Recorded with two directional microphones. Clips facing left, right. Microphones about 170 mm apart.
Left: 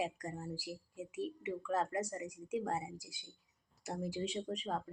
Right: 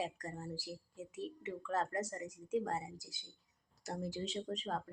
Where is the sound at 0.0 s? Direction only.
10° left (ahead or behind).